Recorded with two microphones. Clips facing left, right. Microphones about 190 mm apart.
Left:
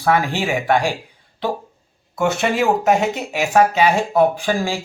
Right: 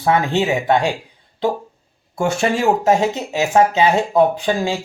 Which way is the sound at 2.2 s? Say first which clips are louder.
Even; 30° right (ahead or behind).